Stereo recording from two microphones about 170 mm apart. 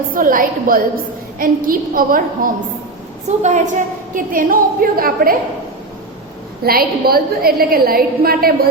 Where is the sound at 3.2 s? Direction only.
45° right (ahead or behind).